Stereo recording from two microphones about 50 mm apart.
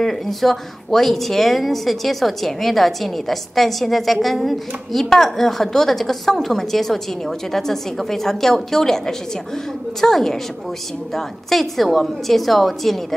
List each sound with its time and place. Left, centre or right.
0.0 s a woman's voice: centre